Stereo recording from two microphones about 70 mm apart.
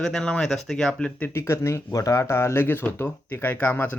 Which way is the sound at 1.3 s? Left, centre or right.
Left.